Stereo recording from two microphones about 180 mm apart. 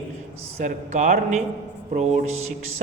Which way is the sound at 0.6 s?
45° right (ahead or behind).